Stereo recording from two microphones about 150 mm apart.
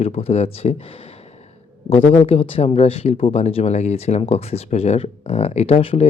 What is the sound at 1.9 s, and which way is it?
Speech, 45° left (ahead or behind).